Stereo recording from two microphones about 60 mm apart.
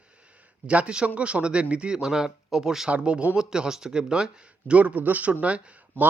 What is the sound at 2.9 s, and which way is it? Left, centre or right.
Speech, right.